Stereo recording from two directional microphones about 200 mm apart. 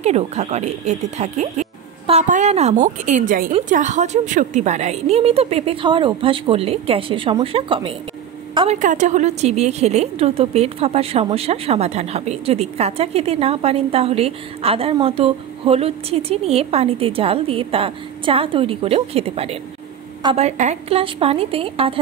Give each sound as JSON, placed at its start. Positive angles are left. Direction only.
{"t": 0.0, "sound": "a woman's voice", "side_deg": -35}